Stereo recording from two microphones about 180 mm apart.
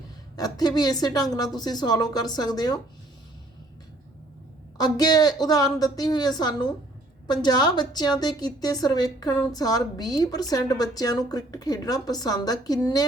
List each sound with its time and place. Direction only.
0.3 s a woman's voice: 20° left (ahead or behind)
4.8 s a woman's voice: 20° left (ahead or behind)